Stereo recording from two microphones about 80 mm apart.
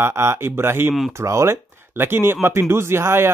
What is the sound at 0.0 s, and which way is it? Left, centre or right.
Speech, right.